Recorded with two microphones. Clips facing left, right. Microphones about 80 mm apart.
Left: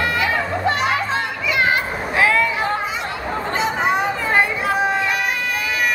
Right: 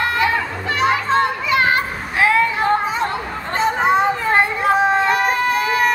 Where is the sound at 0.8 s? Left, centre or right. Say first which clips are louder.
Right 4 dB; right.